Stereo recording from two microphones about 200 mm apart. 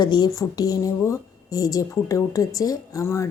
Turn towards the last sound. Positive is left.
turn(degrees=15)  # may be behind; listen again after turning